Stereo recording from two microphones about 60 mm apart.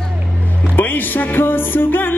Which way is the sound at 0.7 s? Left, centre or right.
Left.